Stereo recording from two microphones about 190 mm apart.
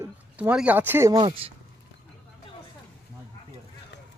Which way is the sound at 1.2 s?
30° right (ahead or behind).